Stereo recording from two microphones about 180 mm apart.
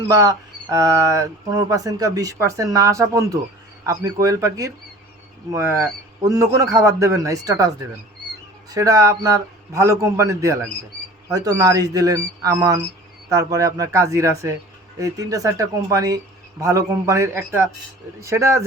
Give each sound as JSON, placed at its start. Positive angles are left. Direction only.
{"t": 0.1, "sound": "speech", "side_deg": -20}
{"t": 8.7, "sound": "speech", "side_deg": -20}